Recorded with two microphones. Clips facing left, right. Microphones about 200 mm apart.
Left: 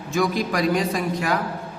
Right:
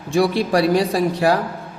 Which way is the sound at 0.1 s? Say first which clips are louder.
Right 5 dB; 35° right (ahead or behind).